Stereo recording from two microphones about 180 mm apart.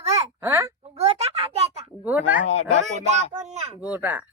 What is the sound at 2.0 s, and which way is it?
Speech, 10° right (ahead or behind).